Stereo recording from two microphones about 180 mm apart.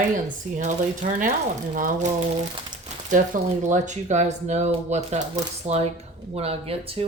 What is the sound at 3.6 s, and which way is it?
Speech, 40° right (ahead or behind).